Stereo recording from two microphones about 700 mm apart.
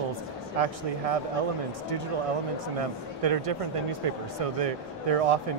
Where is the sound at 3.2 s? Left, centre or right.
Right.